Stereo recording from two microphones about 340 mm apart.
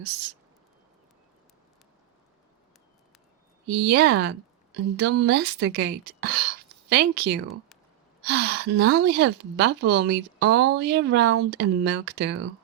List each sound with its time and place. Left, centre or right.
3.7 s a woman's voice: right
9.1 s speech: right